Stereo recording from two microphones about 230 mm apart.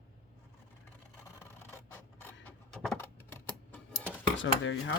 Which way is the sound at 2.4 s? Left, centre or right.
Centre.